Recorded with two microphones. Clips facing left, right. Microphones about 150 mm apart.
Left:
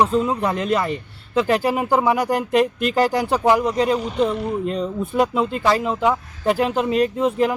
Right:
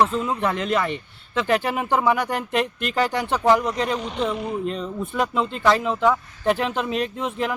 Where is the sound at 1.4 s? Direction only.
35° left (ahead or behind).